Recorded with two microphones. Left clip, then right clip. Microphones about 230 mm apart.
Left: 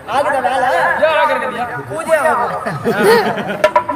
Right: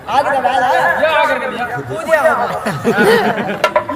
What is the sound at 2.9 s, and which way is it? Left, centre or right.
Speech, centre.